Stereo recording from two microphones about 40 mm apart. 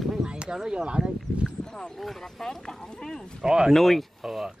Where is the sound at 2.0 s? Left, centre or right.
Centre.